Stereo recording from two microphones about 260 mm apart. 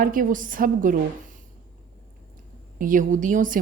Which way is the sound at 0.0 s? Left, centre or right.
Right.